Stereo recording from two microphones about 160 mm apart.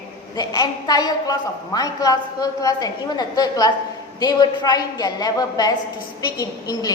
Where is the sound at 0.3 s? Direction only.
25° left (ahead or behind).